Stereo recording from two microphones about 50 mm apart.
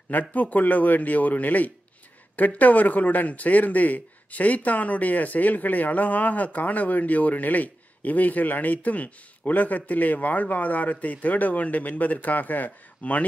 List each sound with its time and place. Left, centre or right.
0.1 s a man's voice: left